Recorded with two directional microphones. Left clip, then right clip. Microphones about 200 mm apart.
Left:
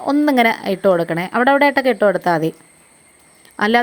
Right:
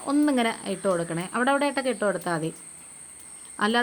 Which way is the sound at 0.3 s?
35° left (ahead or behind).